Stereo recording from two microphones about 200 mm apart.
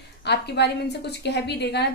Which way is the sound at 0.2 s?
55° left (ahead or behind).